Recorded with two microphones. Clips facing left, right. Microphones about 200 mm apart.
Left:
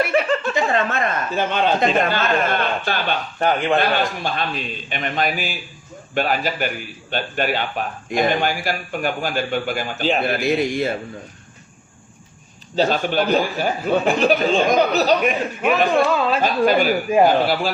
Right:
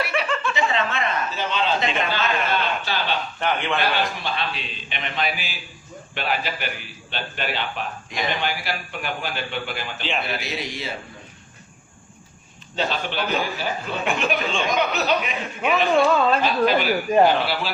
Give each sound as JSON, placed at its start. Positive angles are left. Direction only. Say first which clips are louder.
{"t": 0.0, "sound": "speech", "louder": "left 6 dB", "side_deg": 45}
{"t": 12.7, "sound": "speech", "louder": "left 7 dB", "side_deg": 40}
{"t": 14.0, "sound": "speech", "louder": "left 4 dB", "side_deg": 35}
{"t": 16.0, "sound": "speech", "louder": "even", "side_deg": 5}
{"t": 16.4, "sound": "speech", "louder": "left 3 dB", "side_deg": 45}